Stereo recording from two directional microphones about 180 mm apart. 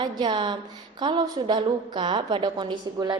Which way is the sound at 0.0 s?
25° right (ahead or behind).